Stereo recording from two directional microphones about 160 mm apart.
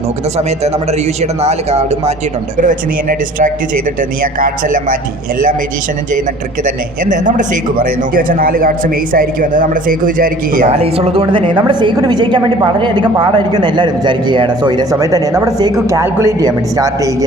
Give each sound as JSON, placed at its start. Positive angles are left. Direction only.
{"t": 0.3, "sound": "a man's voice", "side_deg": -40}
{"t": 2.6, "sound": "speech", "side_deg": -55}
{"t": 7.1, "sound": "speech", "side_deg": -50}
{"t": 10.7, "sound": "a woman's voice", "side_deg": -40}